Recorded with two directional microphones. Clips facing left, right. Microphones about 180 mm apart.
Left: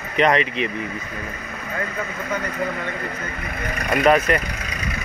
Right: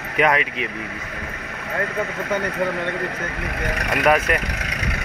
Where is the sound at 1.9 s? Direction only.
70° right (ahead or behind).